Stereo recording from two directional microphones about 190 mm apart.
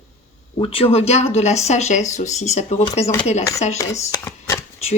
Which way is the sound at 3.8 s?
15° left (ahead or behind).